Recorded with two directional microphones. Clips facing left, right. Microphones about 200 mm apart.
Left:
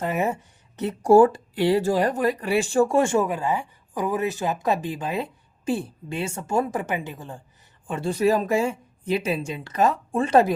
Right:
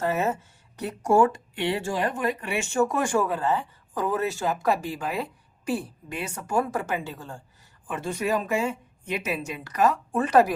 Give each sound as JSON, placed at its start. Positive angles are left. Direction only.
{"t": 0.0, "sound": "speech", "side_deg": 15}
{"t": 0.8, "sound": "speech", "side_deg": 30}
{"t": 7.9, "sound": "speech", "side_deg": 30}